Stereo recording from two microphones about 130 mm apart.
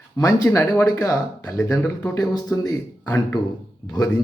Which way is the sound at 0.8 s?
25° left (ahead or behind).